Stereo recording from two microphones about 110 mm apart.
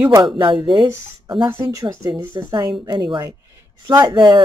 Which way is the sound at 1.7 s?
35° right (ahead or behind).